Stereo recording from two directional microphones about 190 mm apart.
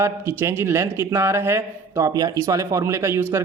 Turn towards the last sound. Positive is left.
turn(degrees=-15)  # may be behind; listen again after turning